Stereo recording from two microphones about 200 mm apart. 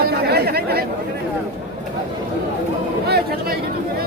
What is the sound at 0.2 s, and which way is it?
Chatter, 50° right (ahead or behind).